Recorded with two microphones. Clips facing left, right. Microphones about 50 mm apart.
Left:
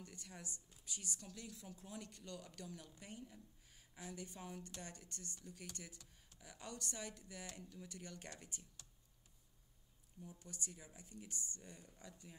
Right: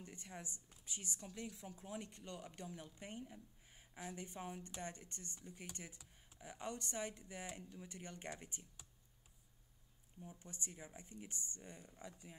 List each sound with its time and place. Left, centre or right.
0.0 s a woman's voice: right
10.4 s a woman's voice: right